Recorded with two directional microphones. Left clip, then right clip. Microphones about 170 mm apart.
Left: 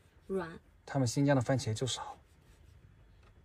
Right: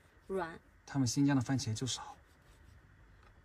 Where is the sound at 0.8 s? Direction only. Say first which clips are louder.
Left 2 dB; 20° right (ahead or behind).